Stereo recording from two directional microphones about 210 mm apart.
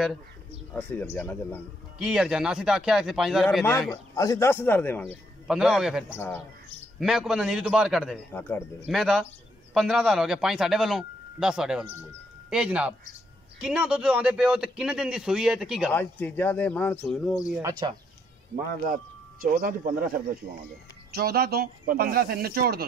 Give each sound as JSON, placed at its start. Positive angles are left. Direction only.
{"t": 0.7, "sound": "speech", "side_deg": 10}
{"t": 2.0, "sound": "a man's voice", "side_deg": -5}
{"t": 3.9, "sound": "speech", "side_deg": 15}
{"t": 5.5, "sound": "a man's voice", "side_deg": -5}
{"t": 6.0, "sound": "speech", "side_deg": 10}
{"t": 7.0, "sound": "a man's voice", "side_deg": 0}
{"t": 8.3, "sound": "speech", "side_deg": 10}
{"t": 8.9, "sound": "a man's voice", "side_deg": 0}
{"t": 15.9, "sound": "speech", "side_deg": 10}
{"t": 17.5, "sound": "speech", "side_deg": -15}
{"t": 19.4, "sound": "speech", "side_deg": -40}